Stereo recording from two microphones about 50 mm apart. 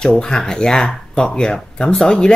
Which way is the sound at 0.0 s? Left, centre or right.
Centre.